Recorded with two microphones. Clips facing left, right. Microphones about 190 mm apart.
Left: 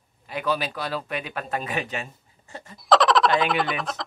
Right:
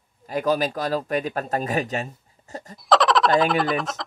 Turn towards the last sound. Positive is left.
turn(degrees=0)  # may be behind; listen again after turning